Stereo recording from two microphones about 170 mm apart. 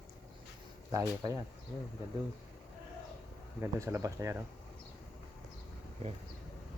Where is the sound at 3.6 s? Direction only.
15° right (ahead or behind).